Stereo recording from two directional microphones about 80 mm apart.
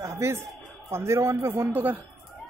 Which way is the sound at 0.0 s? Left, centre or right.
Right.